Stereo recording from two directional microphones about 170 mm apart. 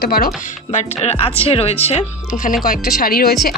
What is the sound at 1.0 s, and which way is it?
Speech, 35° left (ahead or behind).